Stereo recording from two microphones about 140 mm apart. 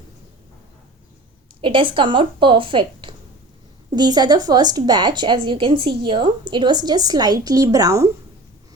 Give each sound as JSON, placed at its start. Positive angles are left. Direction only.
{"t": 1.6, "sound": "a woman's voice", "side_deg": -40}